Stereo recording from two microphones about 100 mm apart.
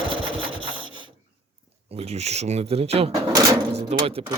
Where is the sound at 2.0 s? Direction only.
90° right.